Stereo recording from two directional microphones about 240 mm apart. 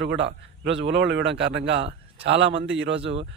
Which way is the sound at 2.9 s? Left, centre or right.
Right.